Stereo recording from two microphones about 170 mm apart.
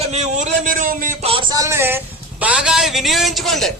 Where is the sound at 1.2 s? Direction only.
35° right (ahead or behind).